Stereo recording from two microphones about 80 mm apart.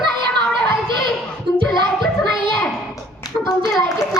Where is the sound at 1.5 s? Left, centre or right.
Right.